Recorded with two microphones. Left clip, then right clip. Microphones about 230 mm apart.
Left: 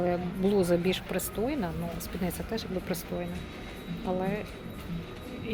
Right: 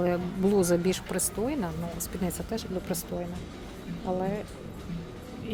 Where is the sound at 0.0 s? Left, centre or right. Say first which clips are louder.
Right 1 dB; right.